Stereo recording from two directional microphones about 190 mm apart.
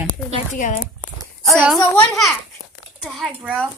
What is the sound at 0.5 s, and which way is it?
Speech, 45° left (ahead or behind).